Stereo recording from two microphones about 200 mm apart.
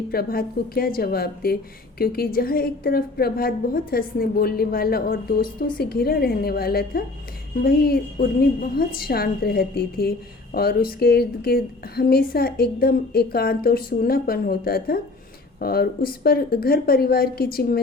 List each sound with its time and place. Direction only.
0.1 s a woman's voice: 50° left (ahead or behind)